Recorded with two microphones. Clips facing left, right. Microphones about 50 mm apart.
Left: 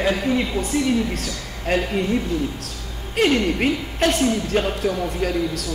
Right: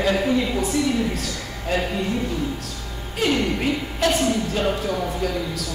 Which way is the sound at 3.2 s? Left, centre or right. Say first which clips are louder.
Left 2 dB; left.